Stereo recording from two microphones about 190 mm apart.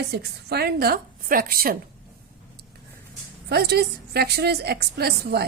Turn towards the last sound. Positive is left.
turn(degrees=-55)  # may be behind; listen again after turning